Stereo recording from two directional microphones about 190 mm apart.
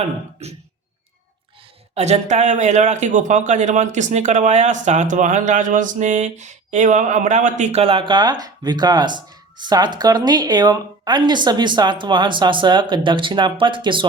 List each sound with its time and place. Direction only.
0.4 s speech: 35° right (ahead or behind)
2.0 s speech: 35° right (ahead or behind)